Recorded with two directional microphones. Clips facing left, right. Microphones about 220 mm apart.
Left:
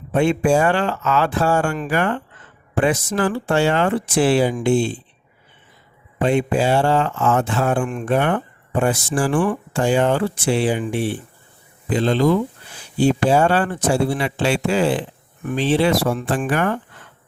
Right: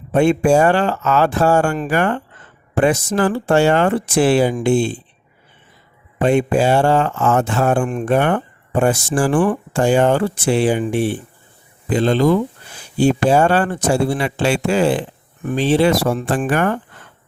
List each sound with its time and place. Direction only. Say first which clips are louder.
0.1 s speech: right 3 dB; 45° right (ahead or behind)
6.2 s speech: right 3 dB; 50° right (ahead or behind)